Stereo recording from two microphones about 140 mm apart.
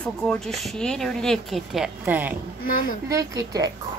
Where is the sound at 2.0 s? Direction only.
15° right (ahead or behind).